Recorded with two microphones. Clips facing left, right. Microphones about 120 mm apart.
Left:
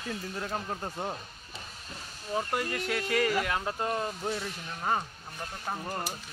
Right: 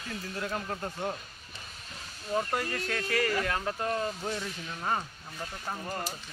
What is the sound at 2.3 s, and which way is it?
Speech, 10° left (ahead or behind).